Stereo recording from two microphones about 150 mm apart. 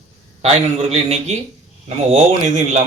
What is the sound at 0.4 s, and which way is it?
Speech, 45° right (ahead or behind).